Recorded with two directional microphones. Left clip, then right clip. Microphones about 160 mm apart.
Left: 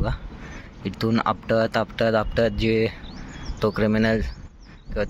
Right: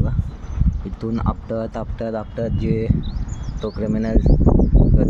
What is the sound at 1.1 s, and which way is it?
Speech, 5° right (ahead or behind).